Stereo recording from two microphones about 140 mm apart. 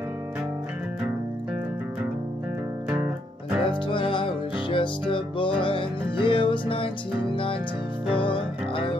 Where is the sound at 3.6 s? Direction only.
35° left (ahead or behind).